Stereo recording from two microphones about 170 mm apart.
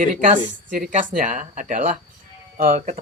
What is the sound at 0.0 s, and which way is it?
Speech, 50° right (ahead or behind).